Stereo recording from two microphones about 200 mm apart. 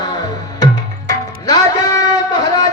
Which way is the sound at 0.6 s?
20° left (ahead or behind).